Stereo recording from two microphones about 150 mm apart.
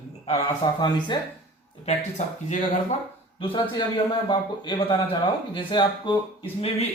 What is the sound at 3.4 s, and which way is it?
Speech, 35° left (ahead or behind).